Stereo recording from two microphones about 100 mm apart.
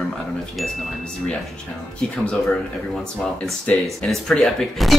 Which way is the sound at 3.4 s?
5° left (ahead or behind).